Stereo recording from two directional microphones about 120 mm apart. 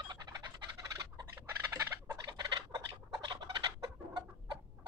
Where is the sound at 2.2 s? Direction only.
40° right (ahead or behind).